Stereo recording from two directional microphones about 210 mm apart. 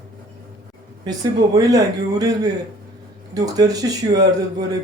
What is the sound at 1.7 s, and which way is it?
Speech, 15° right (ahead or behind).